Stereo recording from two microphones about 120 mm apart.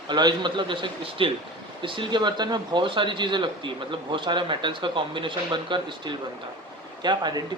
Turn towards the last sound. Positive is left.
turn(degrees=-35)  # may be behind; listen again after turning